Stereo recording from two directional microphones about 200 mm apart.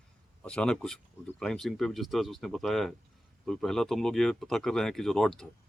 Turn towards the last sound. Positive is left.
turn(degrees=5)  # may be behind; listen again after turning